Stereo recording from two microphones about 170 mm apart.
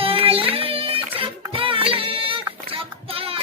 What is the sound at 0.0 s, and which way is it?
Child singing, 35° right (ahead or behind).